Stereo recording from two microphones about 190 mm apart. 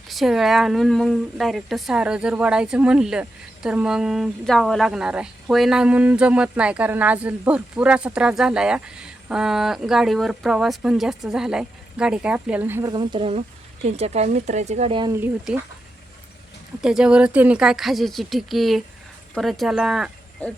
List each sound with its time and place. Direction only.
0.1 s speech: centre (ahead or behind)
12.9 s speech: 25° right (ahead or behind)
15.1 s speech: 10° right (ahead or behind)
16.8 s speech: 5° right (ahead or behind)